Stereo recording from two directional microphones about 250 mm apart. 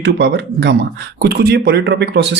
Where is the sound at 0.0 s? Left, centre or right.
Right.